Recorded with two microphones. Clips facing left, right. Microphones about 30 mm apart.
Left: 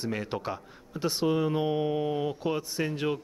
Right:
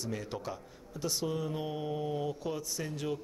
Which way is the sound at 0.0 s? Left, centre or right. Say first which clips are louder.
Left 6 dB; left.